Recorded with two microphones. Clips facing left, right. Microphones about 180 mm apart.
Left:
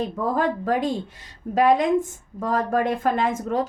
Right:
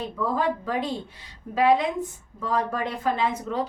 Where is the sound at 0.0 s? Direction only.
45° left (ahead or behind).